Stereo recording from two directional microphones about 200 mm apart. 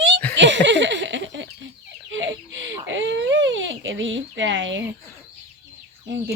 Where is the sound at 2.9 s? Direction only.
65° right (ahead or behind).